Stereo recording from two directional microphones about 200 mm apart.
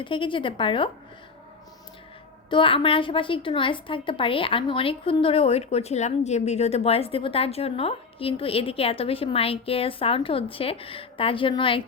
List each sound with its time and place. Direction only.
0.0 s a woman's voice: 25° left (ahead or behind)
2.5 s a woman's voice: 25° left (ahead or behind)